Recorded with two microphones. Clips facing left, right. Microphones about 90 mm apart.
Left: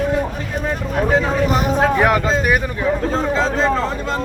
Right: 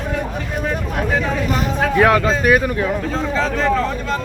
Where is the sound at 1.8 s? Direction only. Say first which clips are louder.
Right 3 dB; 20° left (ahead or behind).